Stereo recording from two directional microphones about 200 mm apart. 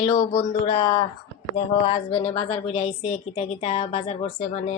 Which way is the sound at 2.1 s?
30° left (ahead or behind).